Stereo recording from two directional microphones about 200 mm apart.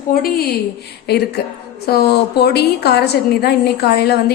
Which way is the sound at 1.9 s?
50° left (ahead or behind).